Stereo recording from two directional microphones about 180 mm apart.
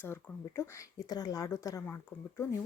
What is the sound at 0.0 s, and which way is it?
Speech, 15° left (ahead or behind).